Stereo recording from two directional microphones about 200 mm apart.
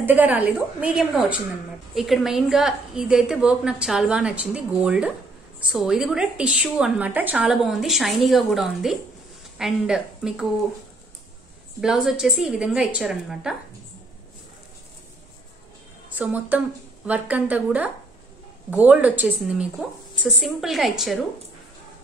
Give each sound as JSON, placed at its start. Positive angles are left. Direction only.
{"t": 0.0, "sound": "a woman's voice", "side_deg": -10}
{"t": 11.8, "sound": "a woman's voice", "side_deg": 0}
{"t": 16.1, "sound": "a woman's voice", "side_deg": -5}